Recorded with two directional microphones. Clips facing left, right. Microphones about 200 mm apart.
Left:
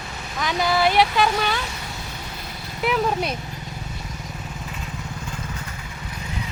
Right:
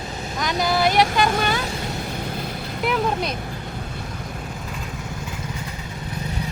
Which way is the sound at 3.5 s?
55° right (ahead or behind).